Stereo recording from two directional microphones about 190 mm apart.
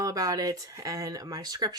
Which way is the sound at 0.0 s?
20° right (ahead or behind).